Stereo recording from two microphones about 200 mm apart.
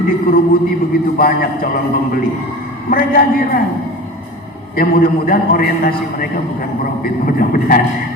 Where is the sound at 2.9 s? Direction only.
45° left (ahead or behind).